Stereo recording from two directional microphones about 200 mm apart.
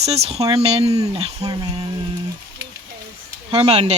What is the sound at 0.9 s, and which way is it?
Speech, 20° right (ahead or behind).